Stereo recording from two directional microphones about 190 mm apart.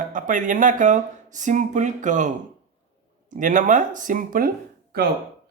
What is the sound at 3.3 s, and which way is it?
Speech, 45° right (ahead or behind).